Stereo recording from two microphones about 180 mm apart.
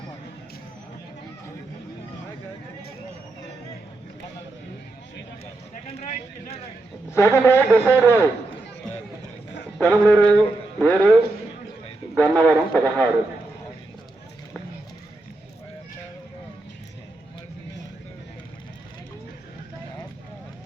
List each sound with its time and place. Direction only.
5.9 s speech: 35° left (ahead or behind)
7.1 s speech: 15° left (ahead or behind)
9.7 s a man's voice: 10° left (ahead or behind)
12.1 s speech: 5° left (ahead or behind)